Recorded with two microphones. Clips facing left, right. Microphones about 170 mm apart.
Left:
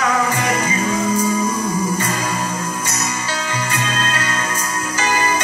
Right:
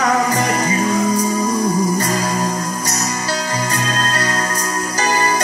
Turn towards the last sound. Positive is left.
turn(degrees=-35)  # may be behind; listen again after turning